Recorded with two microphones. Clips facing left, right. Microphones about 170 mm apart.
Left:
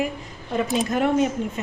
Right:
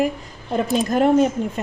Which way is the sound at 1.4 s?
35° right (ahead or behind).